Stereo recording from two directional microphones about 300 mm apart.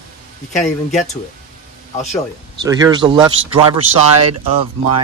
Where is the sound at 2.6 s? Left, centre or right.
Centre.